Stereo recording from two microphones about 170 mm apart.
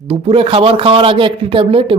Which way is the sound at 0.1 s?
35° right (ahead or behind).